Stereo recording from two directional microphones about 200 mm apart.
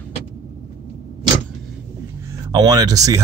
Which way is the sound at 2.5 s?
20° right (ahead or behind).